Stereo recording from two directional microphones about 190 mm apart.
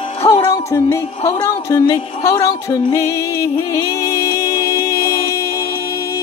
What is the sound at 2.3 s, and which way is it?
Music, 15° left (ahead or behind).